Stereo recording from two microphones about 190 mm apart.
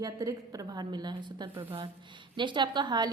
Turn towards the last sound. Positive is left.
turn(degrees=-20)  # may be behind; listen again after turning